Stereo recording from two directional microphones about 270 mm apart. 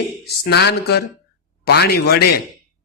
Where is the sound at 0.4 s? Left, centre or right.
Left.